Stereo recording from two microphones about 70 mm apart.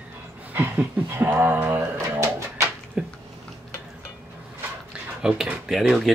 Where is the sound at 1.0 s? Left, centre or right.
Right.